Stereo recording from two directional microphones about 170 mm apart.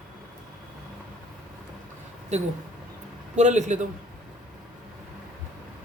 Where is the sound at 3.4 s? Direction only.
45° right (ahead or behind).